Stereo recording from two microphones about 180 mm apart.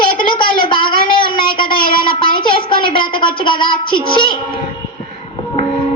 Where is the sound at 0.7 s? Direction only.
25° left (ahead or behind).